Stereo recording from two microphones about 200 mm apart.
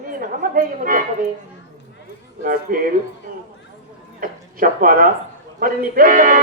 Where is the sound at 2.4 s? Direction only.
45° right (ahead or behind).